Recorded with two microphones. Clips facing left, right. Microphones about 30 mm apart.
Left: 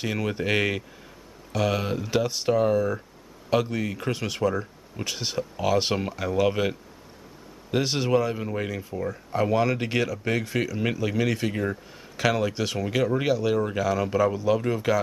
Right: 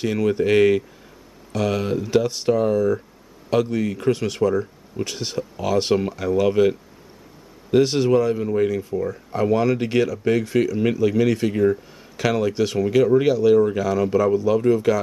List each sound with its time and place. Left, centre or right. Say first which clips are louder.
0.0 s speech: right 7 dB; centre